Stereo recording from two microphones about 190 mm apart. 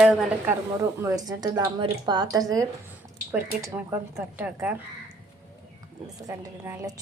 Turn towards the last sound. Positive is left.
turn(degrees=-15)  # may be behind; listen again after turning